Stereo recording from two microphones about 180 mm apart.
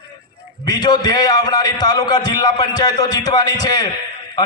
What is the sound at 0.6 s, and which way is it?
A man's voice, 20° left (ahead or behind).